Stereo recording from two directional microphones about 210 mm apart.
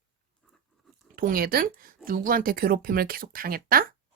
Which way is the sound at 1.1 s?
45° right (ahead or behind).